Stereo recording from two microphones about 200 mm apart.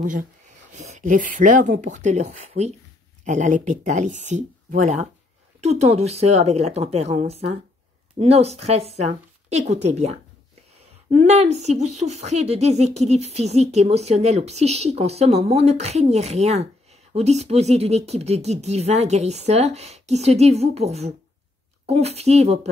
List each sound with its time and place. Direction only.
0.0 s speech: 40° right (ahead or behind)
11.1 s speech: 35° right (ahead or behind)